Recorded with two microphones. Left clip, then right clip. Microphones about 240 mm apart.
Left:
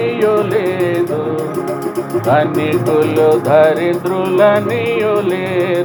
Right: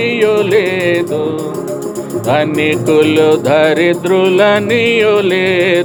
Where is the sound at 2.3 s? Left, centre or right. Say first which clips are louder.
Right 1 dB; right.